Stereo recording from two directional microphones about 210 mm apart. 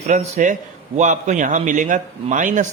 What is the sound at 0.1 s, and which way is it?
A man's voice, 35° right (ahead or behind).